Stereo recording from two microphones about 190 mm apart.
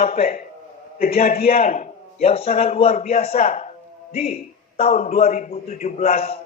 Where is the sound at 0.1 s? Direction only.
50° left (ahead or behind); by 6.4 s 30° left (ahead or behind).